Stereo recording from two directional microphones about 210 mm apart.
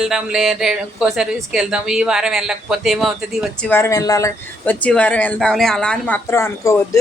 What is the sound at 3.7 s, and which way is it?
Speech, 15° left (ahead or behind).